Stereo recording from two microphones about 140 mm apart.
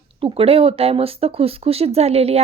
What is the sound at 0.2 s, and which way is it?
Speech, 40° right (ahead or behind).